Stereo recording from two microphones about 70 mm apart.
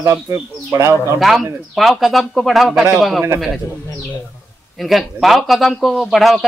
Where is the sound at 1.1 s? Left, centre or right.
Centre.